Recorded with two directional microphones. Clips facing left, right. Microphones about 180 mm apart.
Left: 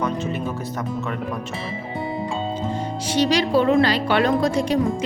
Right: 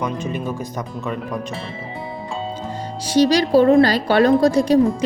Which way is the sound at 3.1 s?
40° right (ahead or behind).